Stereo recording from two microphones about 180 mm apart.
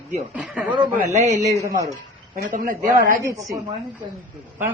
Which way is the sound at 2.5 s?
45° right (ahead or behind).